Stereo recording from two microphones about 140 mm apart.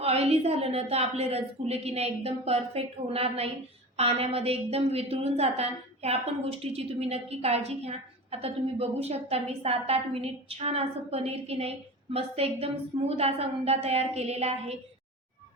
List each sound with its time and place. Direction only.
0.0 s a woman's voice: 45° right (ahead or behind)